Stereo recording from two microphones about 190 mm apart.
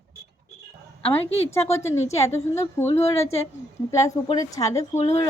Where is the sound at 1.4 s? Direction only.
15° left (ahead or behind).